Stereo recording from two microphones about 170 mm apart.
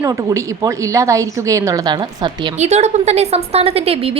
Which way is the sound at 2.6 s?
40° right (ahead or behind).